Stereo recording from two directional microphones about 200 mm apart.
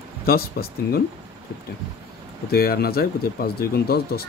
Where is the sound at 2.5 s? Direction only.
50° left (ahead or behind).